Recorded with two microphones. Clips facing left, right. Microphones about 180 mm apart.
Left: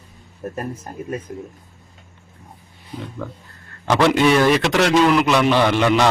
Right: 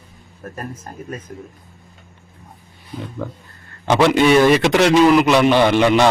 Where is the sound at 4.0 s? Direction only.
5° right (ahead or behind).